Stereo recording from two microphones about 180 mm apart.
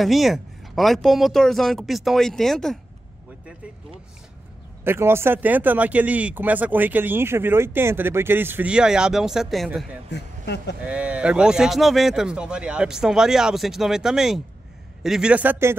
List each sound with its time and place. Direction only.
0.0 s speech: centre (ahead or behind)
4.8 s speech: 15° right (ahead or behind)
10.1 s speech: 70° left (ahead or behind)
10.9 s speech: 5° right (ahead or behind)